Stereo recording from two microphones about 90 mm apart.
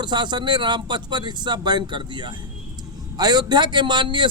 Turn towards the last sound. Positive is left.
turn(degrees=-60)  # may be behind; listen again after turning